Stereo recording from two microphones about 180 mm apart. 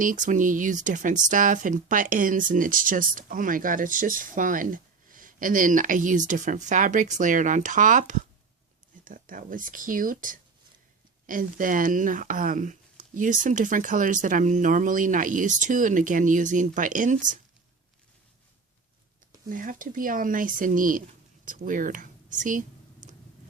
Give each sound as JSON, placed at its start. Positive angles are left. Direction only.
{"t": 0.0, "sound": "speech", "side_deg": -45}
{"t": 19.5, "sound": "speech", "side_deg": -50}